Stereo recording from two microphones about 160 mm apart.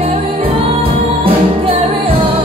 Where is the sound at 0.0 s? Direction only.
35° right (ahead or behind).